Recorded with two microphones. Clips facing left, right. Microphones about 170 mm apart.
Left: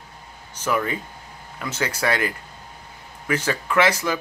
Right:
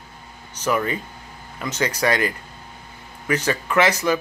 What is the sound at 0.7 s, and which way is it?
Speech, 15° right (ahead or behind).